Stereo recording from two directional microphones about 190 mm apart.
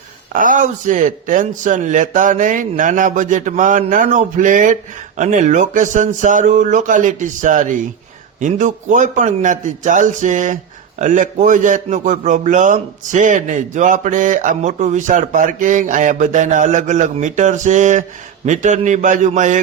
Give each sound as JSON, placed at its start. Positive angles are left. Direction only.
{"t": 0.3, "sound": "a man's voice", "side_deg": -45}